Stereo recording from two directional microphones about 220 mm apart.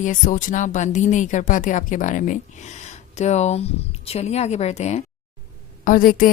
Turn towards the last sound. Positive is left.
turn(degrees=40)  # may be behind; listen again after turning